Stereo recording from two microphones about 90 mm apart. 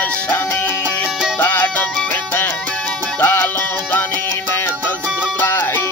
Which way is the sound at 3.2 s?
25° left (ahead or behind).